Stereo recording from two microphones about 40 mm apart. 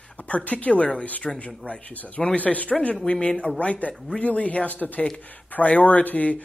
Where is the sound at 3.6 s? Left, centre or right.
Left.